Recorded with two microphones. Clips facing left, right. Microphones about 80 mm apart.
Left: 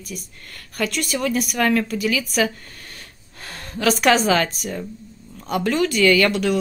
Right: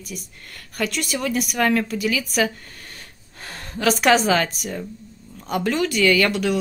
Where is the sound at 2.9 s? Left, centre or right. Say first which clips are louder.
Even; right.